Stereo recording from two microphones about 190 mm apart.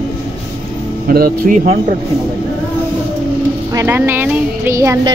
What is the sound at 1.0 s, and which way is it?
Speech, 50° right (ahead or behind).